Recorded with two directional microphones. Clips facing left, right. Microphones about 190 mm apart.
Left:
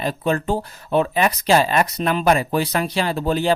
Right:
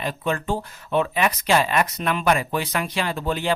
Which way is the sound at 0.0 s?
35° left (ahead or behind).